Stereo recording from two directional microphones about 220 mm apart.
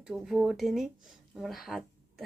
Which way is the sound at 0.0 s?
5° right (ahead or behind).